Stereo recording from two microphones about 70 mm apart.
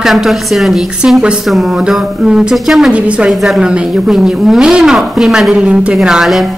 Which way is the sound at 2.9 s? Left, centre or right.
Centre.